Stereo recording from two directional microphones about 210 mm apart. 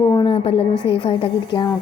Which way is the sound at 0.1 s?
20° left (ahead or behind).